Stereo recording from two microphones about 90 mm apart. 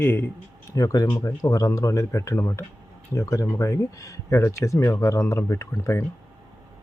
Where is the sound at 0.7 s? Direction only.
45° left (ahead or behind).